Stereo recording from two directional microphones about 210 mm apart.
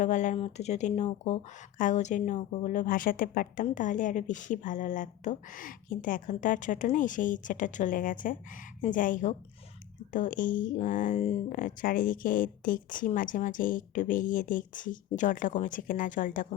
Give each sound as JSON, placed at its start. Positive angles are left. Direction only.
{"t": 0.0, "sound": "speech", "side_deg": 35}